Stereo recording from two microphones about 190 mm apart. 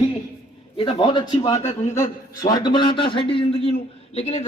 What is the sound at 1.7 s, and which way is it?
Speech, 35° left (ahead or behind).